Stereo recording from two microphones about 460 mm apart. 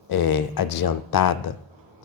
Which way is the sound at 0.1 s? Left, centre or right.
Left.